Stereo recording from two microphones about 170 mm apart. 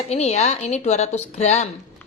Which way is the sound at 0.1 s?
40° left (ahead or behind).